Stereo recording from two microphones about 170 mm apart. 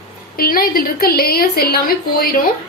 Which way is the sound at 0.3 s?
60° left (ahead or behind).